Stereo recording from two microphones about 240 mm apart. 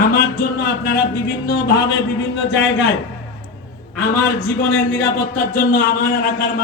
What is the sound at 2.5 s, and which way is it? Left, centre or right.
Speech, left.